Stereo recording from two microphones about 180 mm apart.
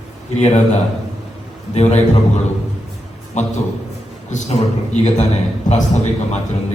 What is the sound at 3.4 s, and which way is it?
A man's voice, 40° left (ahead or behind).